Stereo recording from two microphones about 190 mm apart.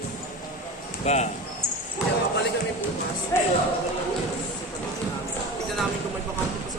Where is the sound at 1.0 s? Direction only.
35° left (ahead or behind).